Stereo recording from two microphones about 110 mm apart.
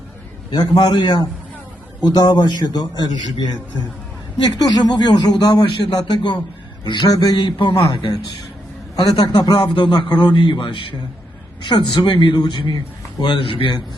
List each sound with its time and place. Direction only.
0.5 s speech: 40° left (ahead or behind)
4.4 s a man's voice: 40° left (ahead or behind)
9.1 s a man's voice: 40° left (ahead or behind)